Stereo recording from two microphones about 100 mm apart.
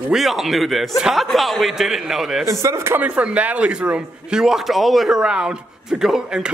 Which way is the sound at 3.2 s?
15° right (ahead or behind).